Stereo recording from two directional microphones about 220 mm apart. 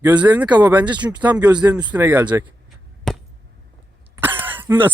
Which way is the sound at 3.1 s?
Centre (ahead or behind).